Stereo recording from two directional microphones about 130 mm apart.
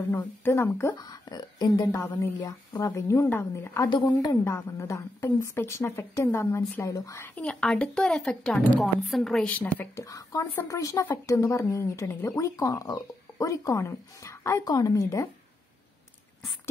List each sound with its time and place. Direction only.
0.1 s speech: 15° left (ahead or behind)
1.0 s speech: 30° left (ahead or behind)
3.9 s speech: 30° left (ahead or behind)
7.4 s a woman's voice: 5° left (ahead or behind)
10.0 s speech: 25° left (ahead or behind)